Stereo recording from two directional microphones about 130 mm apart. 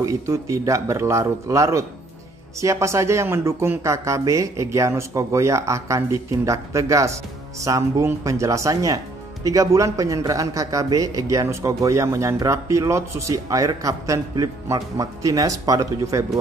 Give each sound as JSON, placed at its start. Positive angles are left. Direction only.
{"t": 0.0, "sound": "speech", "side_deg": -25}